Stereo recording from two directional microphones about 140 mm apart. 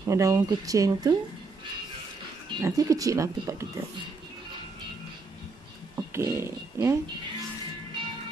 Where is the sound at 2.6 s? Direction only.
25° right (ahead or behind).